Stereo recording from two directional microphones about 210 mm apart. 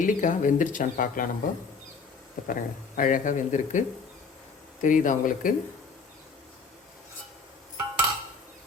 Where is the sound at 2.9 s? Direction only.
40° left (ahead or behind).